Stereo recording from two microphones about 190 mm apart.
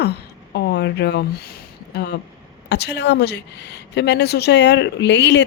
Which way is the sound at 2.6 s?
60° left (ahead or behind).